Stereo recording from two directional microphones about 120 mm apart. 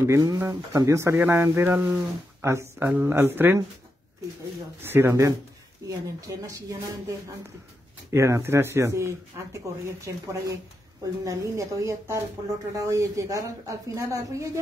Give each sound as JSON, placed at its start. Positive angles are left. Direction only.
{"t": 0.0, "sound": "speech", "side_deg": -30}
{"t": 4.8, "sound": "speech", "side_deg": -20}